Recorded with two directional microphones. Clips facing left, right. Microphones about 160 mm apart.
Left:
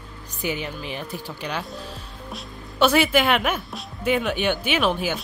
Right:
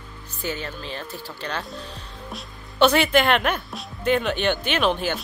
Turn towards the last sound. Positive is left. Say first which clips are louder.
# even
turn(degrees=5)  # may be behind; listen again after turning